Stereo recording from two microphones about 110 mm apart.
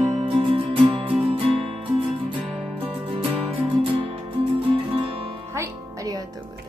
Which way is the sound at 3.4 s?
55° right (ahead or behind).